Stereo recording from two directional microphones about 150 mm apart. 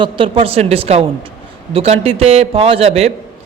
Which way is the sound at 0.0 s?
35° right (ahead or behind).